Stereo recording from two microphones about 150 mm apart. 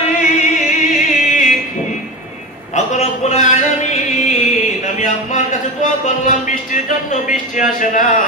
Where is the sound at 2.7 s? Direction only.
50° left (ahead or behind).